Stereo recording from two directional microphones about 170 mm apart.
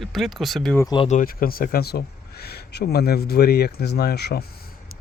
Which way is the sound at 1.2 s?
60° left (ahead or behind).